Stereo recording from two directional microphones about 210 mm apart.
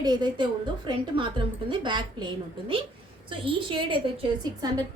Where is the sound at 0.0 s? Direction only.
20° right (ahead or behind).